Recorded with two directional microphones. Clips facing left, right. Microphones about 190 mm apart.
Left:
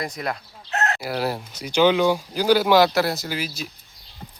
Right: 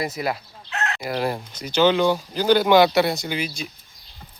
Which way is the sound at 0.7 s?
40° left (ahead or behind).